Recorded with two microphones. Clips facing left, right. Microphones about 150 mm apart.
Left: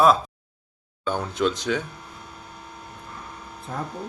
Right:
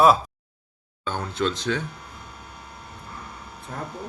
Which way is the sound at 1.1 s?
10° left (ahead or behind).